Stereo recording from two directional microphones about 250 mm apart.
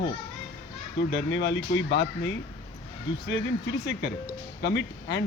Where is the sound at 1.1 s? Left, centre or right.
Left.